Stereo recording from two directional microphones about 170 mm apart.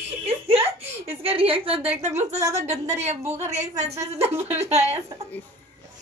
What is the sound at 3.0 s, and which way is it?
A woman's voice, 40° right (ahead or behind).